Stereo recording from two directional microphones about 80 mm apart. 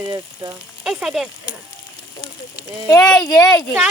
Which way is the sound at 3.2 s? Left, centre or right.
Left.